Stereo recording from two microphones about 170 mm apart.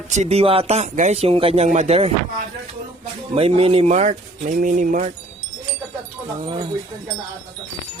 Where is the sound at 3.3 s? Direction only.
35° right (ahead or behind).